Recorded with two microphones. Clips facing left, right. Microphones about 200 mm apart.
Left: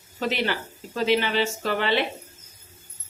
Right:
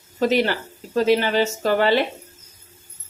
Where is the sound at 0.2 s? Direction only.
40° right (ahead or behind).